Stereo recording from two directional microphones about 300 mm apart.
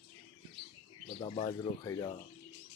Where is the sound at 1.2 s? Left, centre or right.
Centre.